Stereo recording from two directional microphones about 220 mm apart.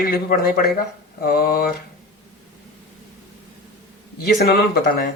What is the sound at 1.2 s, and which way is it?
Mantra, 40° left (ahead or behind).